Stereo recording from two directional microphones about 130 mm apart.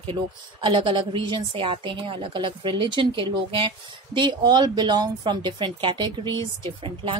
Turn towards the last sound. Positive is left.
turn(degrees=-40)  # may be behind; listen again after turning